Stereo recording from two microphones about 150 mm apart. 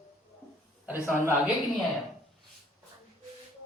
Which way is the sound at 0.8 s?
10° right (ahead or behind).